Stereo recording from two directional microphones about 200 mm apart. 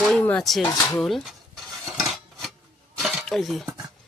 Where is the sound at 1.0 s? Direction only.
Centre (ahead or behind).